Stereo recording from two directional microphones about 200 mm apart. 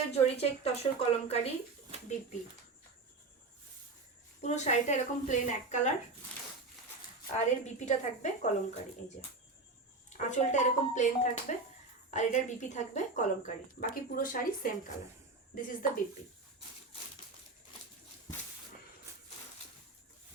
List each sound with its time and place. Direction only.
0.1 s speech: 30° left (ahead or behind)
4.4 s speech: 35° left (ahead or behind)
7.3 s speech: 35° left (ahead or behind)
10.1 s speech: 35° left (ahead or behind)